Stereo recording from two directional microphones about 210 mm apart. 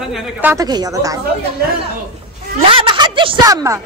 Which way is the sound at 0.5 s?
20° right (ahead or behind).